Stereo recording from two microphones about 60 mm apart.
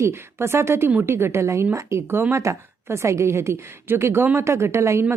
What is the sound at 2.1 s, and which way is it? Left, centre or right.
Speech, right.